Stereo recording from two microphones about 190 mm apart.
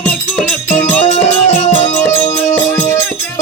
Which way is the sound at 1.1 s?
35° left (ahead or behind).